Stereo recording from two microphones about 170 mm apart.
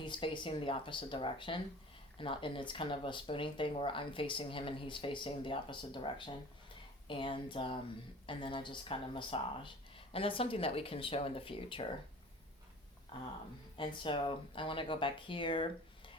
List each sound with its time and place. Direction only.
0.0 s speech: 30° left (ahead or behind)
13.1 s speech: 25° left (ahead or behind)